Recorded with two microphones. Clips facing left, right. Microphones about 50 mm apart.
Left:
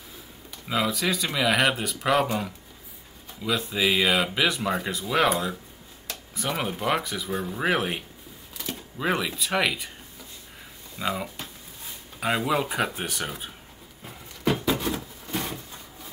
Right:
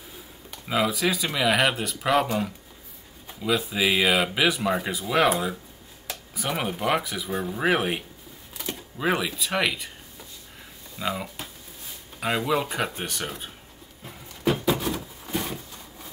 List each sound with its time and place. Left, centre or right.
0.7 s speech: centre
3.3 s speech: centre
11.0 s speech: centre
14.0 s a sound: centre